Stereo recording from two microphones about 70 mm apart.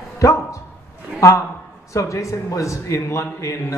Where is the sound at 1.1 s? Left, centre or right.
Left.